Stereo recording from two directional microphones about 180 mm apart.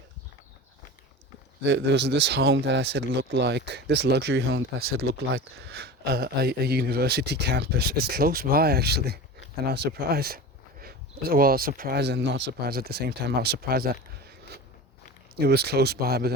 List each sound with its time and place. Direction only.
1.6 s speech: 75° right (ahead or behind); by 13.9 s 55° right (ahead or behind)
15.4 s speech: 60° right (ahead or behind)